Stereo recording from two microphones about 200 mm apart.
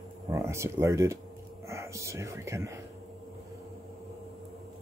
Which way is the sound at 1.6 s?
15° right (ahead or behind).